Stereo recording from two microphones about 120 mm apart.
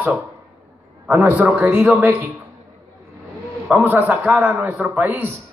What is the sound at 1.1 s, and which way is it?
Speech, 15° right (ahead or behind).